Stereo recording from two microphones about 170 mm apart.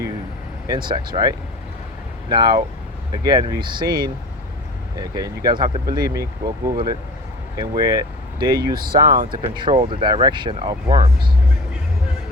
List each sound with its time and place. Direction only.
0.9 s speech: 25° right (ahead or behind)
8.7 s speech: 60° right (ahead or behind)
9.6 s speech: 30° right (ahead or behind)